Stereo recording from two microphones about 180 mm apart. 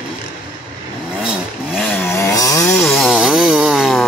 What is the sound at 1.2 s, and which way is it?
Vehicle, centre (ahead or behind).